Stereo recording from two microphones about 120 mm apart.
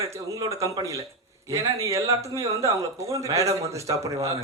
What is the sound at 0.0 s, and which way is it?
Speech, 25° right (ahead or behind).